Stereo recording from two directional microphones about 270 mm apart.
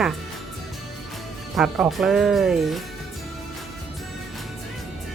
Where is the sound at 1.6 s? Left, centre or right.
Centre.